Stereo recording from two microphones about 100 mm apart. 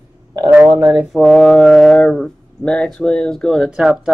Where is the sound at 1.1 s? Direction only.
Centre (ahead or behind).